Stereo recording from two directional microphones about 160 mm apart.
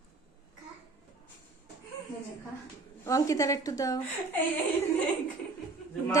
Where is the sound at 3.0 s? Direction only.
20° left (ahead or behind).